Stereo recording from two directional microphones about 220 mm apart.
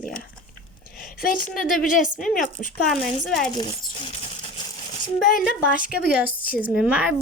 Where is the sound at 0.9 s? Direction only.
40° left (ahead or behind).